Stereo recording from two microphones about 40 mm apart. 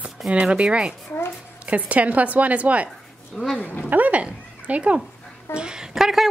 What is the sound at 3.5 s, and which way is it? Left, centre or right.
Speech, left.